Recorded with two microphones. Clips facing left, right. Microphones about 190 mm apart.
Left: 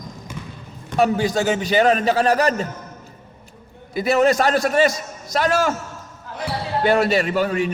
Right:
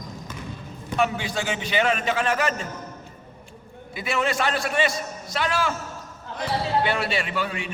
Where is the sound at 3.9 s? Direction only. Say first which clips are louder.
Left 9 dB; 40° left (ahead or behind).